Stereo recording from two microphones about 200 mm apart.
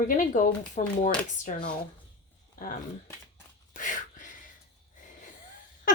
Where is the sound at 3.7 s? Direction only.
40° left (ahead or behind).